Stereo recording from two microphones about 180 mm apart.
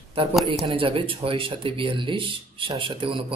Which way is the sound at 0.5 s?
30° right (ahead or behind).